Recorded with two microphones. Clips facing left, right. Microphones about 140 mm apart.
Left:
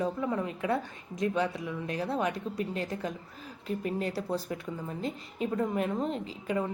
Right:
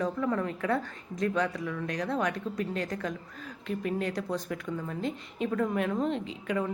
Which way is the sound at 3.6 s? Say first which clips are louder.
Right 1 dB; 35° left (ahead or behind).